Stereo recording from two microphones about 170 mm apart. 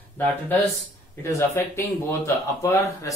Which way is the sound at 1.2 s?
15° left (ahead or behind).